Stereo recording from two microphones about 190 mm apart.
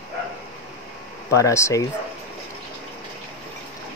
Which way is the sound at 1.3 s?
15° left (ahead or behind).